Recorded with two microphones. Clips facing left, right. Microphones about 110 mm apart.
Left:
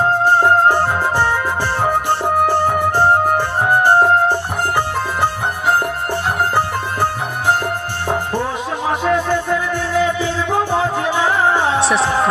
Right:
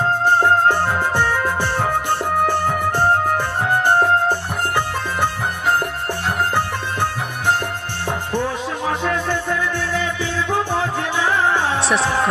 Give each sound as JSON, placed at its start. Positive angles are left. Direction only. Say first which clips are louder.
{"t": 2.6, "sound": "music", "louder": "left 3 dB", "side_deg": 15}
{"t": 8.9, "sound": "music", "louder": "left 5 dB", "side_deg": 15}
{"t": 11.8, "sound": "music", "louder": "left 3 dB", "side_deg": 0}